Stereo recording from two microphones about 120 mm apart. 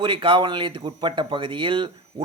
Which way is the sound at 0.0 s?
45° right (ahead or behind).